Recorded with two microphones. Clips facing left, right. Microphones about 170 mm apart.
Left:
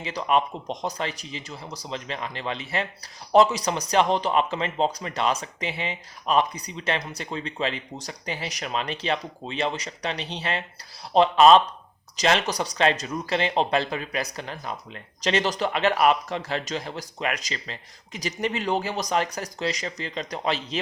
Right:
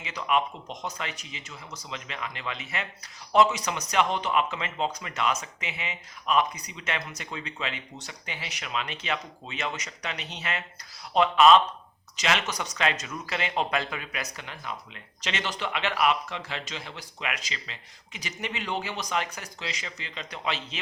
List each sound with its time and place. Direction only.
0.0 s speech: 35° left (ahead or behind)